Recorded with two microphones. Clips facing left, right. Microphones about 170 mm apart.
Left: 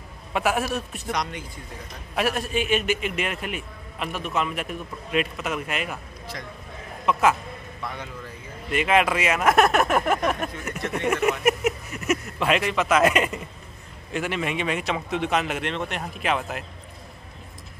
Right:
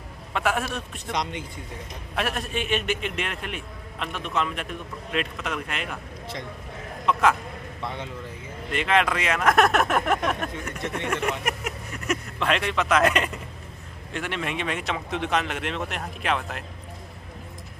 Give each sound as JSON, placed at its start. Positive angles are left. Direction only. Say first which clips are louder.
{"t": 0.3, "sound": "a man's voice", "louder": "left 2 dB", "side_deg": 10}
{"t": 1.1, "sound": "a man's voice", "louder": "even", "side_deg": -25}
{"t": 2.1, "sound": "a man's voice", "louder": "left 4 dB", "side_deg": 5}
{"t": 7.1, "sound": "a man's voice", "louder": "left 1 dB", "side_deg": 5}
{"t": 7.8, "sound": "a man's voice", "louder": "right 1 dB", "side_deg": -25}
{"t": 8.7, "sound": "a man's voice", "louder": "left 2 dB", "side_deg": 10}
{"t": 11.4, "sound": "a sound", "louder": "left 8 dB", "side_deg": 5}
{"t": 14.1, "sound": "a man's voice", "louder": "left 3 dB", "side_deg": 5}